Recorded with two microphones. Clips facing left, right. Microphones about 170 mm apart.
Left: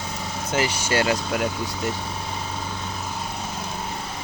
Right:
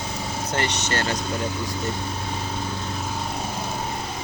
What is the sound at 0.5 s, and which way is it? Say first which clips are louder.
Speech: left 4 dB; 5° left (ahead or behind).